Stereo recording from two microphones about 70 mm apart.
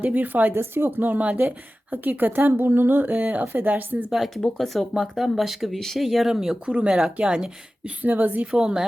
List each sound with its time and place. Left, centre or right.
0.0 s speech: right
4.4 s a woman's voice: centre; by 8.5 s right
8.5 s a woman's voice: centre